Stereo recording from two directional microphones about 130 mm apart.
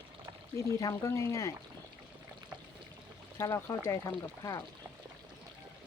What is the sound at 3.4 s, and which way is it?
Speech, 20° left (ahead or behind).